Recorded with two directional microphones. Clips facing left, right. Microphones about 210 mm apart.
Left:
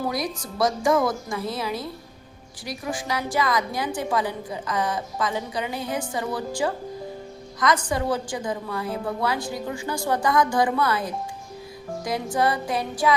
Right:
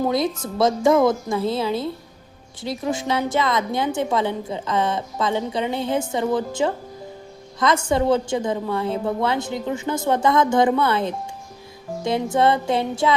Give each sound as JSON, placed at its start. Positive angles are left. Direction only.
{"t": 0.0, "sound": "a woman's voice", "side_deg": -25}